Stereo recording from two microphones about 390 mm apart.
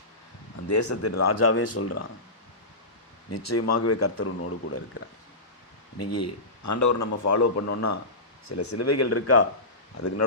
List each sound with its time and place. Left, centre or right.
0.7 s speech: left
3.3 s speech: left
6.0 s a man's voice: left